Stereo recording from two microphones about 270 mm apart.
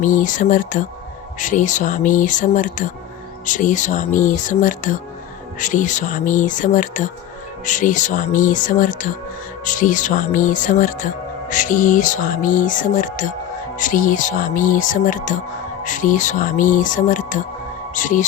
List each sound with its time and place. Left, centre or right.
0.0 s speech: left